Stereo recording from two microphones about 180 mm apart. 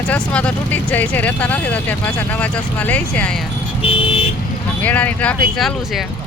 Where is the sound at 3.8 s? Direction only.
30° left (ahead or behind).